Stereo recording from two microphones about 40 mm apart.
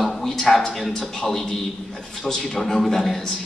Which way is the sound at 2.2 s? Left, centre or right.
Centre.